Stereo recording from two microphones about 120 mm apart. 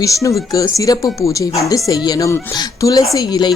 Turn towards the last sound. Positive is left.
turn(degrees=35)  # may be behind; listen again after turning